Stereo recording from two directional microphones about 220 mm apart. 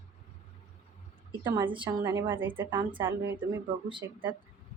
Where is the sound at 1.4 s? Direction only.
15° right (ahead or behind).